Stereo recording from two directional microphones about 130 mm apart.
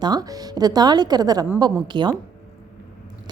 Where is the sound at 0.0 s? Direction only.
30° right (ahead or behind).